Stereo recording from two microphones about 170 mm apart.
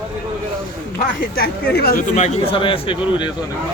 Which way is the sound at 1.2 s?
60° left (ahead or behind).